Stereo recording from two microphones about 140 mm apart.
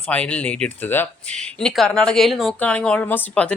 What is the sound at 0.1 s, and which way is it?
Speech, 10° left (ahead or behind).